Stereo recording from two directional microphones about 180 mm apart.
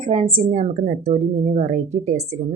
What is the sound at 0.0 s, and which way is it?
A woman's voice, 30° right (ahead or behind).